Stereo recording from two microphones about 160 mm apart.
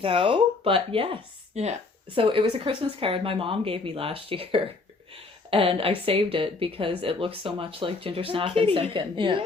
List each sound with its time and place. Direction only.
0.0 s speech: 35° right (ahead or behind)